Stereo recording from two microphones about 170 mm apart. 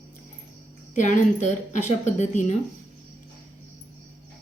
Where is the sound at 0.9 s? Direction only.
45° left (ahead or behind).